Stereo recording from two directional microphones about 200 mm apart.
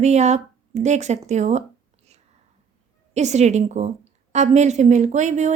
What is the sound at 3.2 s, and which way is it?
A woman's voice, 35° right (ahead or behind).